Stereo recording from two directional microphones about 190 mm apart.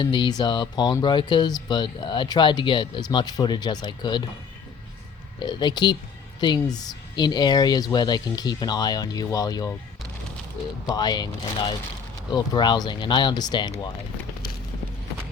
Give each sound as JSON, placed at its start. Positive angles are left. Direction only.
{"t": 0.0, "sound": "speech", "side_deg": 25}
{"t": 5.4, "sound": "speech", "side_deg": 25}
{"t": 10.8, "sound": "speech", "side_deg": 20}